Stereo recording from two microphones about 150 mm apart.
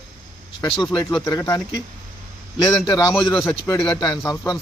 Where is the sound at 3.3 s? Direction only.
15° left (ahead or behind).